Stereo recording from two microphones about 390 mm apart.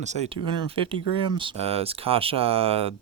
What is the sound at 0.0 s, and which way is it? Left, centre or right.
Speech, centre.